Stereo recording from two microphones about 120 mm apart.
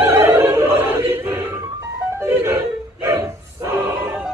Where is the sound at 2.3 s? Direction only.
20° right (ahead or behind).